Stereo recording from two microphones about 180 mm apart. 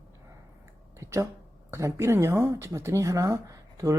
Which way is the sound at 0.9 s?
15° right (ahead or behind).